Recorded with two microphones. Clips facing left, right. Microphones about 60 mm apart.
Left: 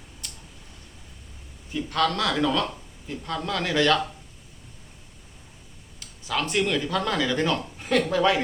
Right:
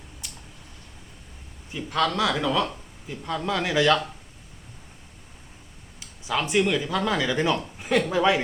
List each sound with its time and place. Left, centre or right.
0.2 s a sound: centre
1.7 s speech: centre
6.0 s speech: centre